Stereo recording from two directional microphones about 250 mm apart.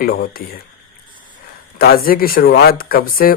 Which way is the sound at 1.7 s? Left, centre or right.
Left.